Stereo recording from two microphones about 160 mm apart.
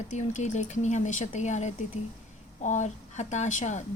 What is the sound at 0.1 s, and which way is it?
A woman's voice, 50° left (ahead or behind).